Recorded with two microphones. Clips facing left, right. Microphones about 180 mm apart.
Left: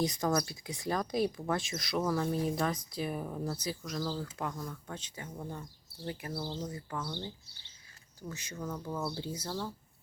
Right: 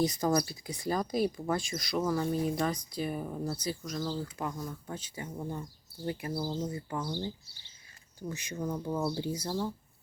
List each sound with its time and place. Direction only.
0.0 s speech: centre (ahead or behind)
8.3 s speech: 15° right (ahead or behind)